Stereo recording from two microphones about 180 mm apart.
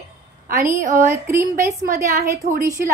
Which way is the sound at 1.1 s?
15° right (ahead or behind).